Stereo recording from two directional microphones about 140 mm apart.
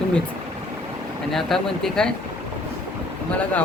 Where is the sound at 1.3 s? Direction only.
5° left (ahead or behind).